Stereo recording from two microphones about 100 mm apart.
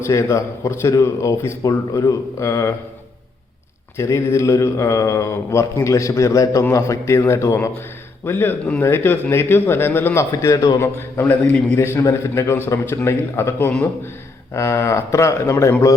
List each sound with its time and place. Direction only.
0.0 s speech: 30° left (ahead or behind)
3.9 s speech: 30° left (ahead or behind)
10.8 s speech: 25° left (ahead or behind)